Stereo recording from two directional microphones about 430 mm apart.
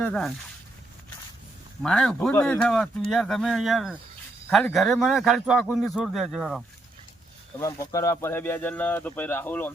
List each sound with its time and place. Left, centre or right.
0.0 s a man's voice: centre
1.8 s a man's voice: centre
7.9 s a man's voice: centre